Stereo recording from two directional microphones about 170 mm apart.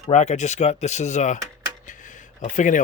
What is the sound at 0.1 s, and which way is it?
Speech, 45° left (ahead or behind).